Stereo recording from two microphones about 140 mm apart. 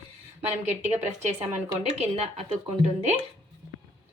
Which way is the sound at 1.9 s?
50° right (ahead or behind).